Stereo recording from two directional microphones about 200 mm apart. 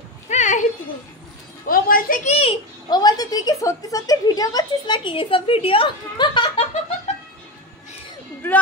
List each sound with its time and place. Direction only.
0.3 s a sound: 35° left (ahead or behind)
1.7 s a woman's voice: 45° left (ahead or behind)
2.3 s a child's voice: 25° left (ahead or behind)